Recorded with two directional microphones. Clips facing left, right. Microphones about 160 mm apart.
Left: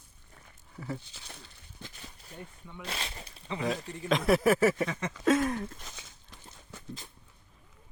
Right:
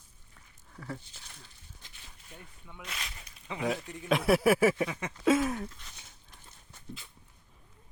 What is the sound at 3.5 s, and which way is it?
Speech, 10° right (ahead or behind).